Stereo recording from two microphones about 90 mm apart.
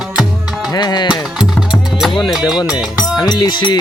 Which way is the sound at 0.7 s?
50° left (ahead or behind).